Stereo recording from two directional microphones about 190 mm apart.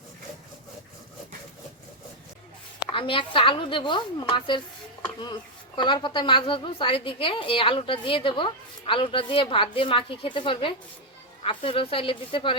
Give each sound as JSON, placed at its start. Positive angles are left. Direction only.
{"t": 2.8, "sound": "a woman's voice", "side_deg": 30}